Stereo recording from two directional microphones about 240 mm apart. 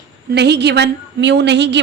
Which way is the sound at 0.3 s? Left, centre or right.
Right.